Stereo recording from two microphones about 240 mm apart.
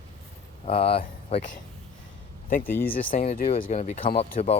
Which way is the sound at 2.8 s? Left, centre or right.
Left.